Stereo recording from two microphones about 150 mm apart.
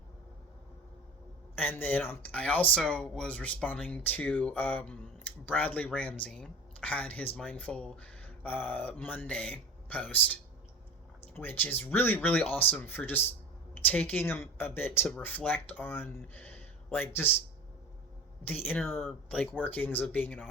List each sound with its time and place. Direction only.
1.5 s speech: 10° left (ahead or behind)
18.4 s speech: 15° left (ahead or behind)